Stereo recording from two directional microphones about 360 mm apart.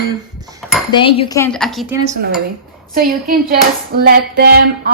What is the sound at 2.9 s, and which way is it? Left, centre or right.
Speech, right.